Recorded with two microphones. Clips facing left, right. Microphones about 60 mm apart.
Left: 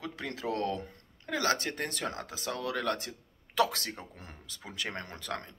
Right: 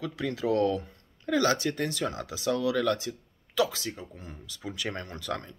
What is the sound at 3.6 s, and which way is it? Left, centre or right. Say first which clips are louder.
Speech: right 1 dB; left.